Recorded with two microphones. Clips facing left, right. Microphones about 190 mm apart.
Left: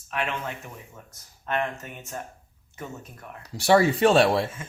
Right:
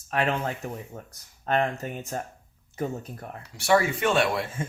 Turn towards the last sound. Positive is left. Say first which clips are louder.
# left 5 dB
turn(degrees=35)  # may be behind; listen again after turning